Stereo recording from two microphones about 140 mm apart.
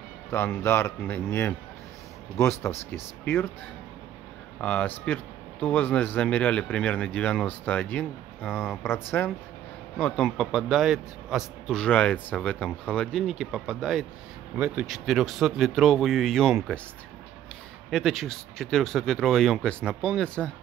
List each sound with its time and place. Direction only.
0.3 s speech: 15° left (ahead or behind)
4.6 s a man's voice: 10° left (ahead or behind)
17.9 s a man's voice: centre (ahead or behind)